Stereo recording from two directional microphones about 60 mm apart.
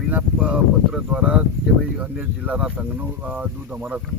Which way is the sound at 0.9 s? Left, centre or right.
Centre.